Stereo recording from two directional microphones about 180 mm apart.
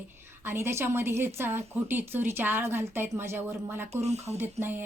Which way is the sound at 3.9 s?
35° right (ahead or behind).